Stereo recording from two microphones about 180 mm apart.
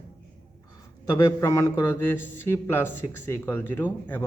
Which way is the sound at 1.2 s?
15° left (ahead or behind).